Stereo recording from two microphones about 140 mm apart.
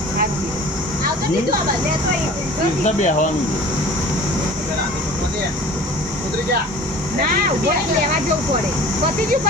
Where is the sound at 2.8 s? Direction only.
60° left (ahead or behind).